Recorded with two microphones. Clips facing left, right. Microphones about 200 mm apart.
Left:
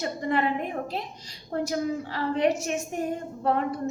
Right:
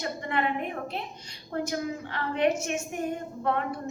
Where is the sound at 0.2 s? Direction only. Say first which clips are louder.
Left 4 dB; 35° left (ahead or behind).